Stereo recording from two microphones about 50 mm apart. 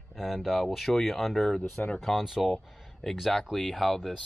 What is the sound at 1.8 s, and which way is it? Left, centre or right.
Speech, left.